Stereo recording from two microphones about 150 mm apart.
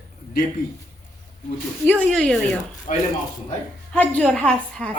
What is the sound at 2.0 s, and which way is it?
Speech, 5° left (ahead or behind).